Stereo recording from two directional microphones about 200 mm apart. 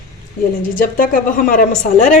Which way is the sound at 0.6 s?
45° left (ahead or behind).